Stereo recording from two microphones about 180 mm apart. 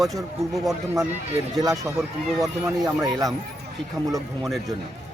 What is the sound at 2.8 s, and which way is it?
Speech, 20° right (ahead or behind).